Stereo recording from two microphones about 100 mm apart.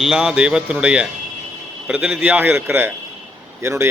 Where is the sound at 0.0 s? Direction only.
5° right (ahead or behind).